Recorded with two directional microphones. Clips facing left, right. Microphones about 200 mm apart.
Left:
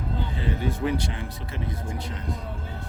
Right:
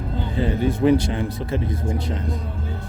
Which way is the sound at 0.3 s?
35° right (ahead or behind).